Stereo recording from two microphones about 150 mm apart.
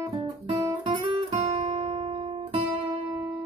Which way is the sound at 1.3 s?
50° right (ahead or behind).